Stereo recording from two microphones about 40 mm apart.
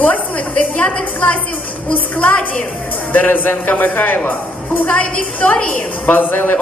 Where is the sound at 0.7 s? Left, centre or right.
Left.